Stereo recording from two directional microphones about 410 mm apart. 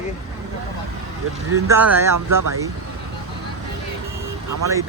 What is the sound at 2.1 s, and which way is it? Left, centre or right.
Speech, right.